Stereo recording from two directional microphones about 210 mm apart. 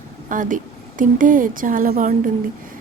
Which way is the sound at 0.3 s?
40° right (ahead or behind).